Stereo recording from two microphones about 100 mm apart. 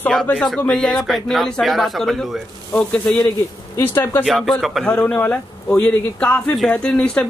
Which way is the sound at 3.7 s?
25° left (ahead or behind).